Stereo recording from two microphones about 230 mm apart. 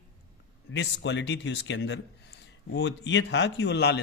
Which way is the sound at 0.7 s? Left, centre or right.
Left.